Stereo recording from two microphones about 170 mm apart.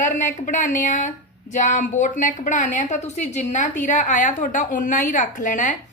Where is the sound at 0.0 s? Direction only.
50° left (ahead or behind).